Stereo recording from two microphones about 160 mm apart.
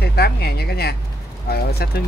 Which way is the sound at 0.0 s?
80° left.